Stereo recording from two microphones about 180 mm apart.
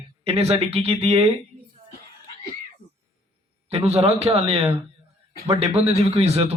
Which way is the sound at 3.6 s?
35° right (ahead or behind).